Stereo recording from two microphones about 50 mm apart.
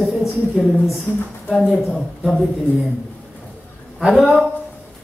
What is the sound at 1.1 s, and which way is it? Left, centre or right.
Speech, left.